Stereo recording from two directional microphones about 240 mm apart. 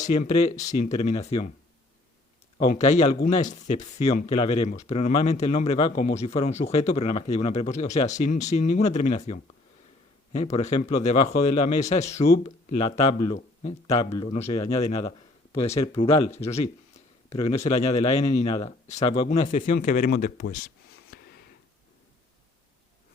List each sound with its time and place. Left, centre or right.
0.0 s speech: left
2.6 s speech: left
17.6 s speech: left
21.1 s a sound: left